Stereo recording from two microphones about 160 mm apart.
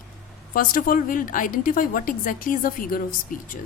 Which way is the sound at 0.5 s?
60° left (ahead or behind).